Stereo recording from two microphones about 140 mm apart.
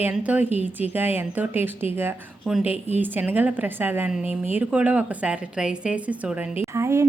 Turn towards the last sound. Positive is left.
turn(degrees=-20)  # may be behind; listen again after turning